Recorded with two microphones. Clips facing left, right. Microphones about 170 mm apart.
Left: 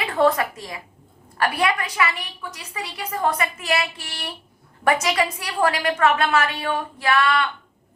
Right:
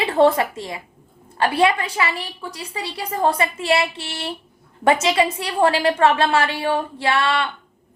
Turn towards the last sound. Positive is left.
turn(degrees=-30)  # may be behind; listen again after turning